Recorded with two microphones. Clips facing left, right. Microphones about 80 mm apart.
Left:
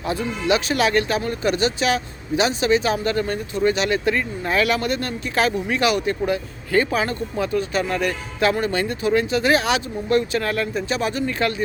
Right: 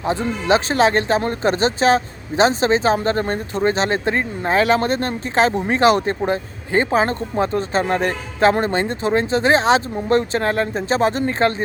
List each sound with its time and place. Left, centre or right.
0.0 s speech: right